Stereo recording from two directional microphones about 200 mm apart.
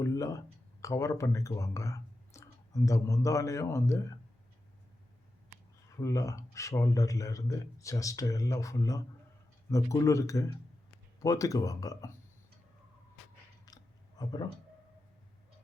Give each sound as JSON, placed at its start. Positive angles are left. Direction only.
{"t": 0.0, "sound": "speech", "side_deg": 15}
{"t": 6.0, "sound": "speech", "side_deg": 15}
{"t": 13.7, "sound": "a sound", "side_deg": 20}
{"t": 14.2, "sound": "speech", "side_deg": 20}